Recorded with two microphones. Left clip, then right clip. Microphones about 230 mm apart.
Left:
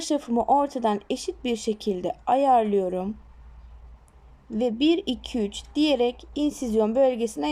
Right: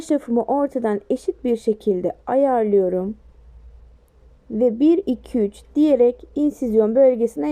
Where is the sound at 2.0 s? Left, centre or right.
Centre.